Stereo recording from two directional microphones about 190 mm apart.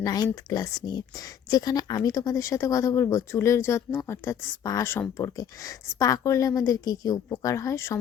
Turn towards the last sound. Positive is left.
turn(degrees=15)  # may be behind; listen again after turning